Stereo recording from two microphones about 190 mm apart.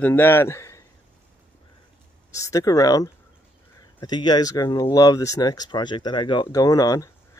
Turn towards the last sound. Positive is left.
turn(degrees=20)  # may be behind; listen again after turning